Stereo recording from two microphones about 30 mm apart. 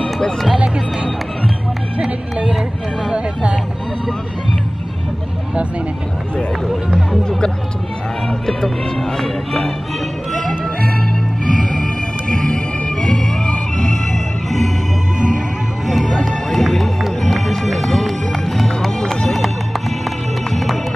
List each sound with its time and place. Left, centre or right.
7.2 s music: left
8.3 s speech: centre
11.7 s music: centre
15.1 s music: right
15.9 s music: centre